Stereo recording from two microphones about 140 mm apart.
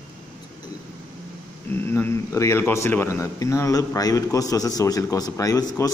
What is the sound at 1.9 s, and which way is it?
A man's voice, 15° left (ahead or behind).